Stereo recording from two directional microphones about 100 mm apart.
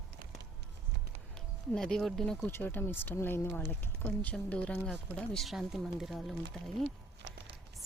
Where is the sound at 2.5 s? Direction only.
20° left (ahead or behind).